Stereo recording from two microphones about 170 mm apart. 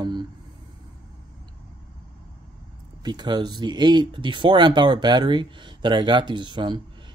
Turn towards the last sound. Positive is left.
turn(degrees=-25)  # may be behind; listen again after turning